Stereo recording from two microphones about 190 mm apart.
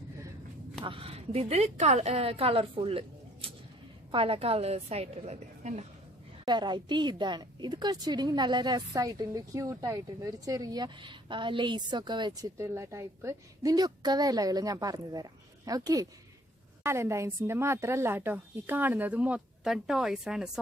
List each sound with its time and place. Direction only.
0.8 s a woman's voice: 30° right (ahead or behind)
6.4 s a woman's voice: 25° right (ahead or behind); by 20.5 s 5° right (ahead or behind)